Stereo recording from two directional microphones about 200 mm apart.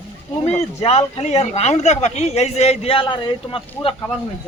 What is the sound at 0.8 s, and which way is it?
Speech, 30° left (ahead or behind).